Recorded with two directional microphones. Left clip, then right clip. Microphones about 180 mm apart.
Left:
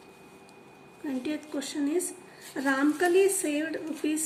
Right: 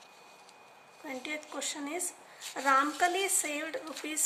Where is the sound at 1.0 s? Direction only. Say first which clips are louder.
Left 5 dB; 35° right (ahead or behind).